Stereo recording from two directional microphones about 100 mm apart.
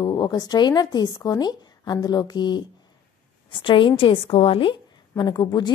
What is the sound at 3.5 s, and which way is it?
A woman's voice, 60° left (ahead or behind).